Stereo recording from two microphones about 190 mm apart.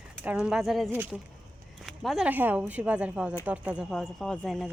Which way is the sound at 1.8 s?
Centre (ahead or behind).